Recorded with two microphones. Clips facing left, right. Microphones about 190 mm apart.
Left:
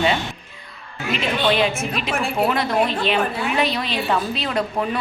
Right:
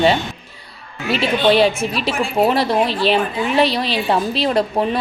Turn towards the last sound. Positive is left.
turn(degrees=-35)  # may be behind; listen again after turning